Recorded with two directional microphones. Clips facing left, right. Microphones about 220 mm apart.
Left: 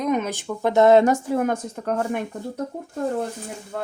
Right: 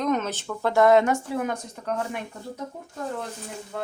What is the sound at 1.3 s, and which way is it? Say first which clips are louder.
Speech: left 6 dB; 45° left (ahead or behind).